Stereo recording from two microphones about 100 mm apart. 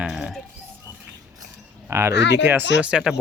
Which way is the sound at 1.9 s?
25° right (ahead or behind).